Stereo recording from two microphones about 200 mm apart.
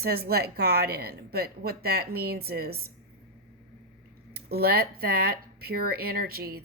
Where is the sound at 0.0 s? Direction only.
50° right (ahead or behind).